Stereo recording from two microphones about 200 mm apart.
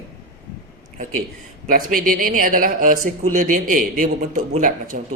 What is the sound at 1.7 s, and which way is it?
A man's voice, 45° right (ahead or behind).